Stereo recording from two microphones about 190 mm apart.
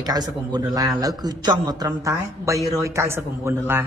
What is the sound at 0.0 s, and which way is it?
A man's voice, 20° right (ahead or behind).